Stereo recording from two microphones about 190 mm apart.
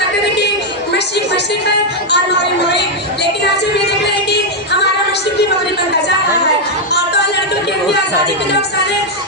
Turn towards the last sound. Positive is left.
turn(degrees=60)  # may be behind; listen again after turning